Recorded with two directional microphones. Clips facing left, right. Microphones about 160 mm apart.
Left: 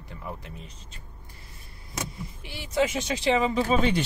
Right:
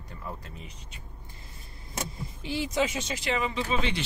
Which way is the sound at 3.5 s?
45° left (ahead or behind).